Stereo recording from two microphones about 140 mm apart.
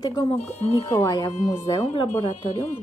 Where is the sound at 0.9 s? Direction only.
25° left (ahead or behind).